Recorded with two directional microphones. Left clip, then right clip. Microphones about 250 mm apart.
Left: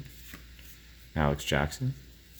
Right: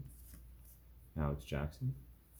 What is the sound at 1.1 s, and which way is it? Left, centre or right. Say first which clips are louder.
Speech: left 14 dB; left.